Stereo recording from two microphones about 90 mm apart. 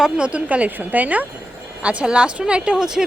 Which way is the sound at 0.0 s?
10° right (ahead or behind).